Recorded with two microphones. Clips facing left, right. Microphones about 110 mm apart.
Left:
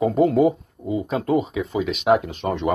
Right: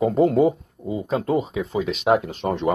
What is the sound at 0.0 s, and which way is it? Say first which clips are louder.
Speech: even; 35° right (ahead or behind).